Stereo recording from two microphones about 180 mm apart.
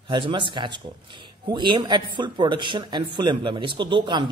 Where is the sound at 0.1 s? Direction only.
25° right (ahead or behind).